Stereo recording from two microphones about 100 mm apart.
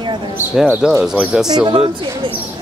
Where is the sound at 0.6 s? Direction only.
15° right (ahead or behind).